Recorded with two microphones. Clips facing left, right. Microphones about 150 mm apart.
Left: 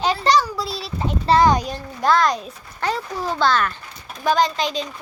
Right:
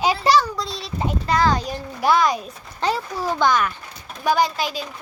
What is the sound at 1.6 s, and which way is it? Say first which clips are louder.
Speech: even; 5° right (ahead or behind).